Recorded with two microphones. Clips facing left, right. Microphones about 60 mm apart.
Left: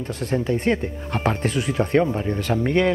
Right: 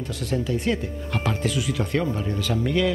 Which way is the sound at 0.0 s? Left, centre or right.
Left.